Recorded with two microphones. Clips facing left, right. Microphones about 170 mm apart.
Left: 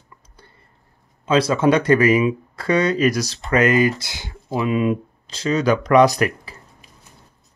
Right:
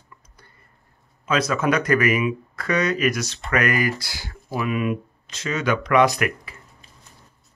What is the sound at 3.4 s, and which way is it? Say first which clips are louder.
Speech: left 6 dB; 25° left (ahead or behind).